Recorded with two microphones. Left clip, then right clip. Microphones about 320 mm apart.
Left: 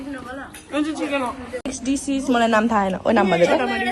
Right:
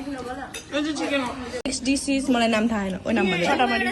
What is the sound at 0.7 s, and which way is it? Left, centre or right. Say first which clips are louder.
Speech: left 2 dB; centre.